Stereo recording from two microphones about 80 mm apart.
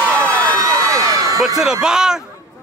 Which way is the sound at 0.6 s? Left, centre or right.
Right.